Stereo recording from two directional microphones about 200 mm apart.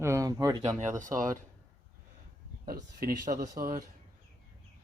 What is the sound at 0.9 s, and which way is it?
Speech, 40° right (ahead or behind).